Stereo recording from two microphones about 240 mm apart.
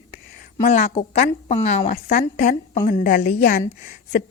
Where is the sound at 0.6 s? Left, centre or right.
Left.